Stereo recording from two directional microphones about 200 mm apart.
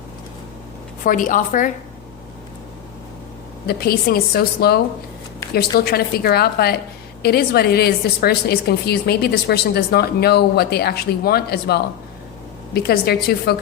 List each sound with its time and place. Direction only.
1.0 s a woman's voice: 40° left (ahead or behind)
3.7 s a woman's voice: 50° left (ahead or behind)